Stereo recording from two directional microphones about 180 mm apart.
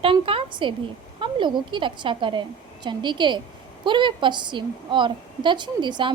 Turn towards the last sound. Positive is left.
turn(degrees=-25)  # may be behind; listen again after turning